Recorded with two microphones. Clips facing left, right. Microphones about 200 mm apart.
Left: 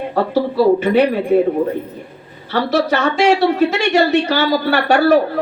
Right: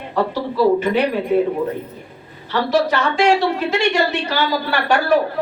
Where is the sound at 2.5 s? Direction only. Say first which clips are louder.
Left 1 dB; 45° left (ahead or behind).